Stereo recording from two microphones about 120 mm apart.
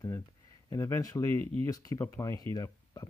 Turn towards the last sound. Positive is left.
turn(degrees=30)  # may be behind; listen again after turning